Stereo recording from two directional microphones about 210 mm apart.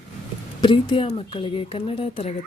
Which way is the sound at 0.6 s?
25° left (ahead or behind).